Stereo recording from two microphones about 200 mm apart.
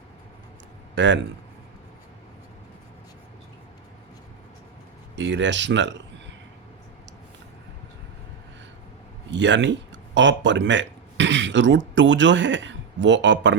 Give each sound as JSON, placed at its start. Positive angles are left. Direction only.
{"t": 0.9, "sound": "speech", "side_deg": -65}
{"t": 5.1, "sound": "speech", "side_deg": -65}
{"t": 9.3, "sound": "speech", "side_deg": -65}